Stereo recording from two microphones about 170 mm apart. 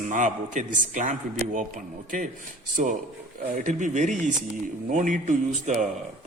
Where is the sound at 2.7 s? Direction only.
50° right (ahead or behind).